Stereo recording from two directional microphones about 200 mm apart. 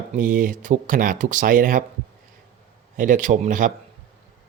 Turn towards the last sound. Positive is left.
turn(degrees=-40)  # may be behind; listen again after turning